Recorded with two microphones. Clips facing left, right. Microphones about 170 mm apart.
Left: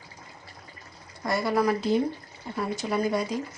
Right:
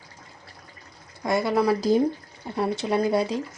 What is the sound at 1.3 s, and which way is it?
Speech, 20° right (ahead or behind).